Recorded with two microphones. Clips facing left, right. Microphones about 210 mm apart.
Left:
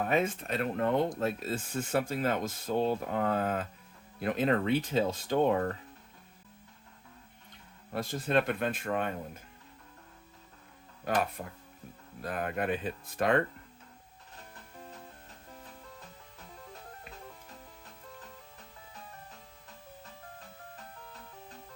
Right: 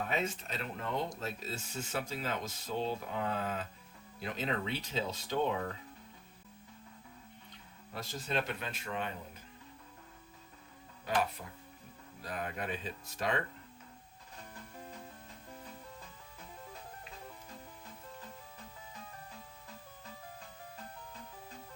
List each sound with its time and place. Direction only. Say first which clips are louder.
0.0 s speech: left 6 dB; 50° left (ahead or behind)
7.9 s speech: left 8 dB; 55° left (ahead or behind)
11.0 s speech: left 3 dB; 50° left (ahead or behind)